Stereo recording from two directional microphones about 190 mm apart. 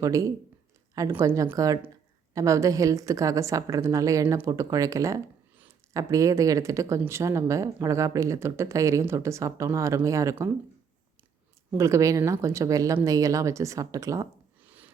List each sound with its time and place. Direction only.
0.0 s speech: 15° right (ahead or behind)
11.7 s speech: 15° right (ahead or behind)